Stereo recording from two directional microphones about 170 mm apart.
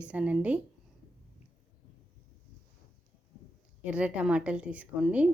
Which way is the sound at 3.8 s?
5° right (ahead or behind).